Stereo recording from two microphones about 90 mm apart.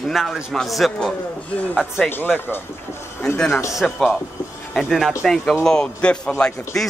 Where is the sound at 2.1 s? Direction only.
20° left (ahead or behind).